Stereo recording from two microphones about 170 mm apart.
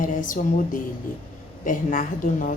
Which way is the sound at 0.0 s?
50° left (ahead or behind).